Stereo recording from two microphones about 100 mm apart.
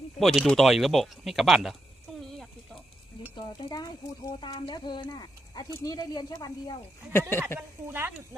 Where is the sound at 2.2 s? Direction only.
5° left (ahead or behind).